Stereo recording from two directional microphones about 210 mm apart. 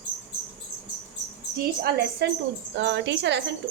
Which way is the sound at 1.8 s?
50° right (ahead or behind).